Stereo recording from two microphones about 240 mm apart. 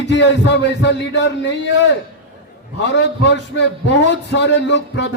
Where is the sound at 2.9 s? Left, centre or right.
Left.